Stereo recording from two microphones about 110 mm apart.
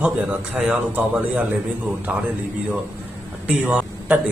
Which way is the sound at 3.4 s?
10° right (ahead or behind).